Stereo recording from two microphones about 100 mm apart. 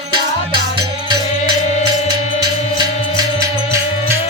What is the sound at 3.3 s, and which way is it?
Music, 30° right (ahead or behind).